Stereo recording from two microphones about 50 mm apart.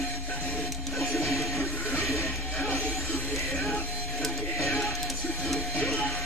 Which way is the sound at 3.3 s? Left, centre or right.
Centre.